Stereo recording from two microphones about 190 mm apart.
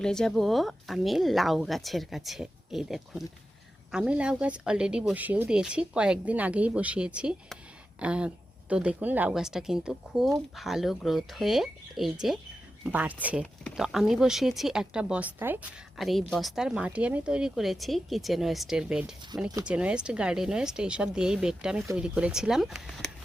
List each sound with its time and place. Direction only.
0.0 s speech: 5° left (ahead or behind)
16.0 s speech: centre (ahead or behind)